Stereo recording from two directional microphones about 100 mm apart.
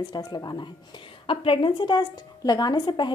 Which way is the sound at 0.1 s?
40° left (ahead or behind).